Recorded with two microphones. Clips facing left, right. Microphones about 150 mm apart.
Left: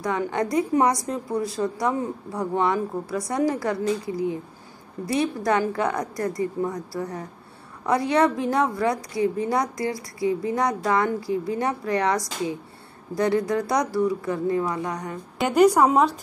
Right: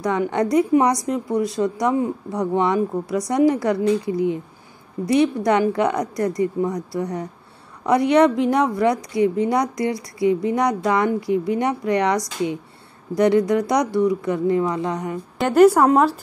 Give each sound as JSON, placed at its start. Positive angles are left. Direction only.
{"t": 0.0, "sound": "speech", "side_deg": -20}
{"t": 7.8, "sound": "speech", "side_deg": -20}
{"t": 15.3, "sound": "speech", "side_deg": 0}